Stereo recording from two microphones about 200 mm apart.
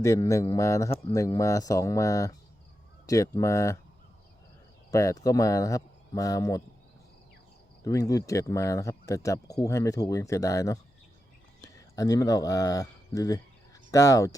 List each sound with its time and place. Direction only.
0.0 s speech: 15° left (ahead or behind)
4.9 s speech: 15° left (ahead or behind)
7.9 s speech: 15° left (ahead or behind)